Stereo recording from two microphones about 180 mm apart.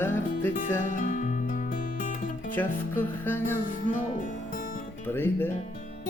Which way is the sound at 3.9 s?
45° left (ahead or behind).